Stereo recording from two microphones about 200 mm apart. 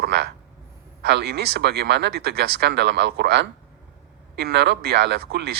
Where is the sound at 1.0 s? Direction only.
55° right (ahead or behind).